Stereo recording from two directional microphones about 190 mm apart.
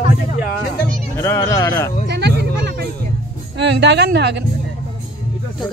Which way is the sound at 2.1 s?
60° right (ahead or behind).